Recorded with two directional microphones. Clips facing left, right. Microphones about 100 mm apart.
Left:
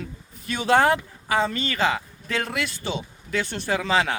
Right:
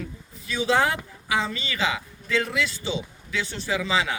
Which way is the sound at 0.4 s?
55° left (ahead or behind).